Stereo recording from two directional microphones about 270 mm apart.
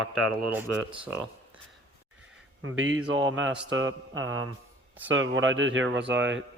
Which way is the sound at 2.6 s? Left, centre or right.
Right.